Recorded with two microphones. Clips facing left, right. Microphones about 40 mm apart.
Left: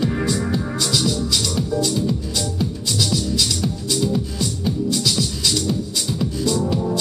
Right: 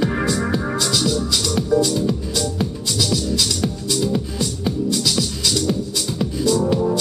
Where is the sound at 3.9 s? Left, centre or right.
Centre.